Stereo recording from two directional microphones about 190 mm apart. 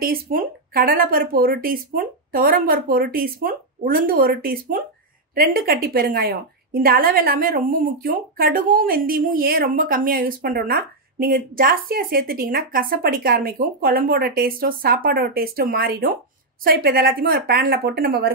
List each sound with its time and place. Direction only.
0.0 s a woman's voice: 50° right (ahead or behind)